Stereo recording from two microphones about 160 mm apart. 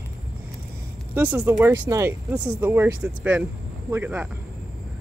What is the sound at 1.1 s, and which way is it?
Speech, 10° right (ahead or behind).